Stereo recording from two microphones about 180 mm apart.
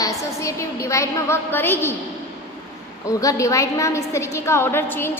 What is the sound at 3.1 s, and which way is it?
A woman's voice, 20° left (ahead or behind).